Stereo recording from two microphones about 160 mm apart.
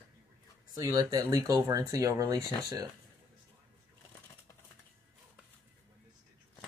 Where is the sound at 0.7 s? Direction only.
20° right (ahead or behind).